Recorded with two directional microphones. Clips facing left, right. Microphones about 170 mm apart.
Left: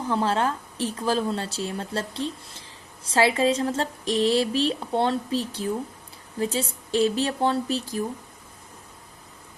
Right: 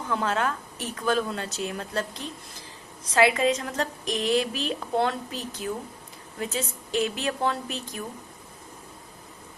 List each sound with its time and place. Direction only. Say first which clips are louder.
0.1 s a woman's voice: left 3 dB; 30° left (ahead or behind)